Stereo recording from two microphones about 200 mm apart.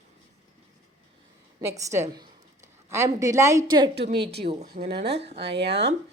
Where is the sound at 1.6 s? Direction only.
15° right (ahead or behind).